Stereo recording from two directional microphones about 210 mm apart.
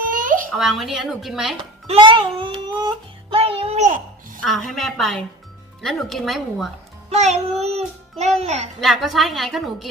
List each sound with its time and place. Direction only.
0.1 s a sound: 40° right (ahead or behind)
0.5 s a woman's voice: centre (ahead or behind)
1.9 s music: 25° right (ahead or behind)
4.4 s a woman's voice: centre (ahead or behind)
7.1 s speech: 30° right (ahead or behind)
8.8 s a woman's voice: centre (ahead or behind)